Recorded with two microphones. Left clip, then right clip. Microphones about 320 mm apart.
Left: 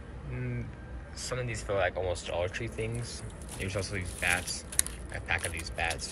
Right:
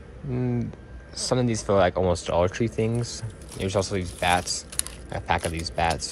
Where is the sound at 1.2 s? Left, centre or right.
Centre.